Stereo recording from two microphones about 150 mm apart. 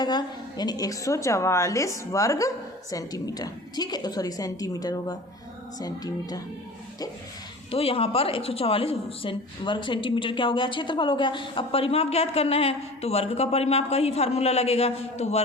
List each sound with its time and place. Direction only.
0.0 s a woman's voice: 30° left (ahead or behind)
7.7 s a woman's voice: 40° left (ahead or behind)